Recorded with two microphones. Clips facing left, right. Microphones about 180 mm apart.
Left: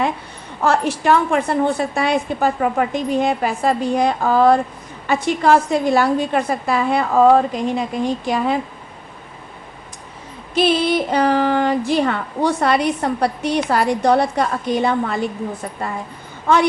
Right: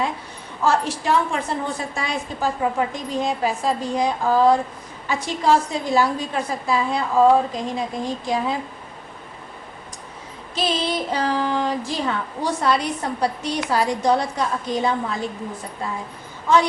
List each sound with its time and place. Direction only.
0.6 s a woman's voice: 65° left (ahead or behind)
10.5 s a woman's voice: 60° left (ahead or behind)